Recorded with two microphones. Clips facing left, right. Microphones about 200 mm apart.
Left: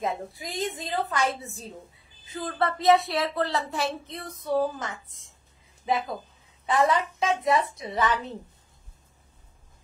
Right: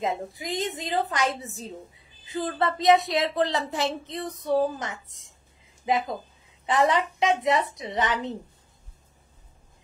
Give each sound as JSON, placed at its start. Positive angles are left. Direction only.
{"t": 0.0, "sound": "speech", "side_deg": -20}
{"t": 2.3, "sound": "speech", "side_deg": -20}
{"t": 6.8, "sound": "speech", "side_deg": -20}